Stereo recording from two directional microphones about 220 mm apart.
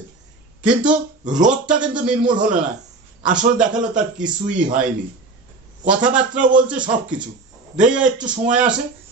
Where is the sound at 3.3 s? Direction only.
5° right (ahead or behind).